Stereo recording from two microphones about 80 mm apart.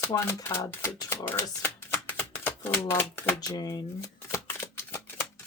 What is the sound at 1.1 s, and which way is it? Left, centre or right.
Shuffling cards, left.